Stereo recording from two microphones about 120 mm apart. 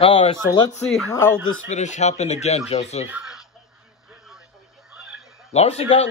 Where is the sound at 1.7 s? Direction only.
80° left.